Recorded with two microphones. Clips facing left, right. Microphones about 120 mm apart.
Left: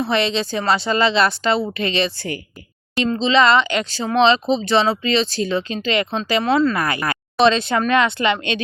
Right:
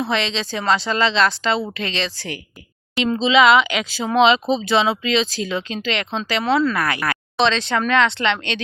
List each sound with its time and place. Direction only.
0.0 s speech: 5° left (ahead or behind)
2.0 s speech: 85° right
2.9 s speech: 5° right (ahead or behind)